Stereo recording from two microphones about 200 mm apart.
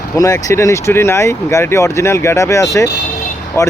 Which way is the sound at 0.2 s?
15° left (ahead or behind).